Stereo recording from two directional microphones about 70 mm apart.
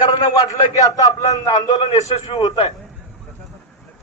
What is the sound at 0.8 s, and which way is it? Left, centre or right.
A man's voice, left.